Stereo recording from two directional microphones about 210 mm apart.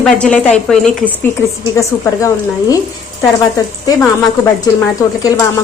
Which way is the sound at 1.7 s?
15° left (ahead or behind).